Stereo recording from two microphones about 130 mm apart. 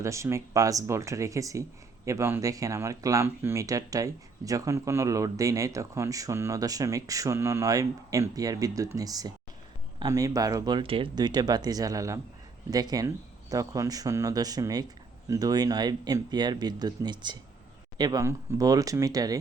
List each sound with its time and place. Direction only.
0.0 s speech: 20° right (ahead or behind)